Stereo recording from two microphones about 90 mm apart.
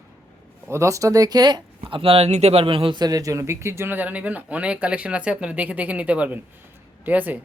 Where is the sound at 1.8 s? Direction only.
85° right.